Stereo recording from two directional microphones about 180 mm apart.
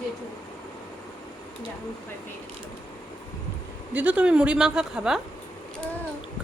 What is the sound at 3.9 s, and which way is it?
Speech, 10° right (ahead or behind).